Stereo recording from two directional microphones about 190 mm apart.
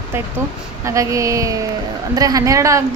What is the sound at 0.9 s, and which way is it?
A woman's voice, 15° right (ahead or behind).